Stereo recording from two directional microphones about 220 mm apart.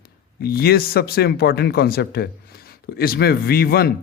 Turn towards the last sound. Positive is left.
turn(degrees=45)  # may be behind; listen again after turning